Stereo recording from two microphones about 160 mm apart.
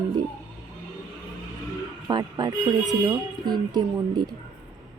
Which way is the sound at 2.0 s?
25° right (ahead or behind).